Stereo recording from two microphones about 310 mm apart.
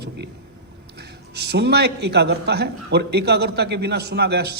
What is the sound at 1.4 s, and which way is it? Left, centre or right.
A man's voice, right.